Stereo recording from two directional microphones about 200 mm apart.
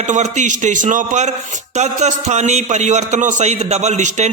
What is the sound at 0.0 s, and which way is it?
A man's voice, 35° right (ahead or behind).